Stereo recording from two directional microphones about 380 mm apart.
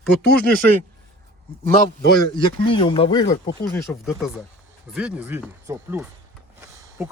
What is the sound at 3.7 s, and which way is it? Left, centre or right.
Speech, centre.